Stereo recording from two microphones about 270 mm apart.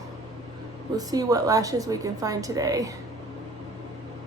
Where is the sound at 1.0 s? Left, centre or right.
Centre.